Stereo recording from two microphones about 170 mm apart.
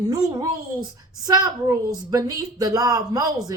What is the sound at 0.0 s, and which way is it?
Speech, 20° right (ahead or behind).